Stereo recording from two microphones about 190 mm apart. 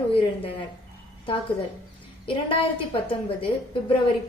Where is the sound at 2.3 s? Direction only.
25° left (ahead or behind).